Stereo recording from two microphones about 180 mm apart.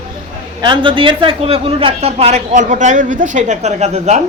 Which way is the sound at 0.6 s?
25° right (ahead or behind).